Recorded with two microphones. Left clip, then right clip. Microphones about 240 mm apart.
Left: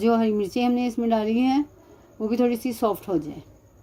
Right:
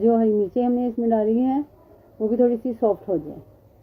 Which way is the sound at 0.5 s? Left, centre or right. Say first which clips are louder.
Right 2 dB; left.